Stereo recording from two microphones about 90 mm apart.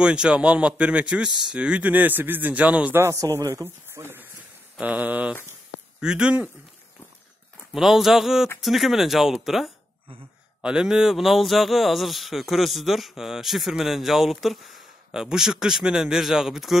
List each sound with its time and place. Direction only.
0.0 s a man's voice: 10° right (ahead or behind)
3.0 s a man's voice: 30° right (ahead or behind); by 6.5 s 10° right (ahead or behind)
7.7 s speech: 5° right (ahead or behind)